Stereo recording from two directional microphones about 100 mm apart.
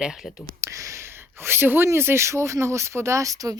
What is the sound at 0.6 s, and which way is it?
Speech, 30° right (ahead or behind).